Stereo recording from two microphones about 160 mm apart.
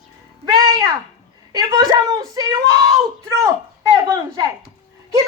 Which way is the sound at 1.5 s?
20° right (ahead or behind).